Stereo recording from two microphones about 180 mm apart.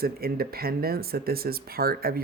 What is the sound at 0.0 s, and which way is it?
Speech, 55° right (ahead or behind).